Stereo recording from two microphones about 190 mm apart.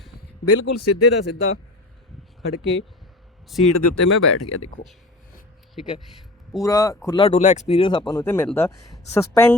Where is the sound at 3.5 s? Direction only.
Centre (ahead or behind).